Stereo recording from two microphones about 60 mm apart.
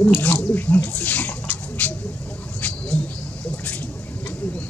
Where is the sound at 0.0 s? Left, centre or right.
Left.